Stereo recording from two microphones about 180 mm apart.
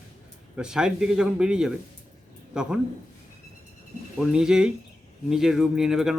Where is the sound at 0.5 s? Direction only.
5° right (ahead or behind).